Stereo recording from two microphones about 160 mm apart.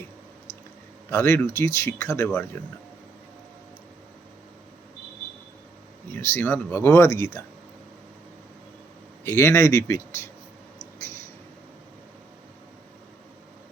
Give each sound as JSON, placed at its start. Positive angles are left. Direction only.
{"t": 1.1, "sound": "speech", "side_deg": 15}
{"t": 6.1, "sound": "speech", "side_deg": 15}
{"t": 9.2, "sound": "speech", "side_deg": 15}